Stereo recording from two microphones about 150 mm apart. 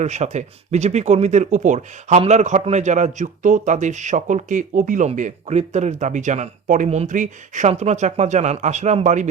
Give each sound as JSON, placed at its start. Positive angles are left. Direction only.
{"t": 0.0, "sound": "speech", "side_deg": -50}